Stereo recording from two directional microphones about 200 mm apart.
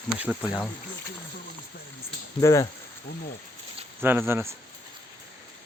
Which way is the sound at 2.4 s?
15° left (ahead or behind).